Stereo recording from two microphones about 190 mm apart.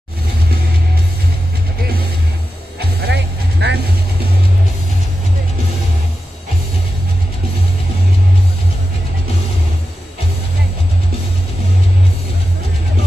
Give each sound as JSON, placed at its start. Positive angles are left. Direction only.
{"t": 3.1, "sound": "music", "side_deg": -65}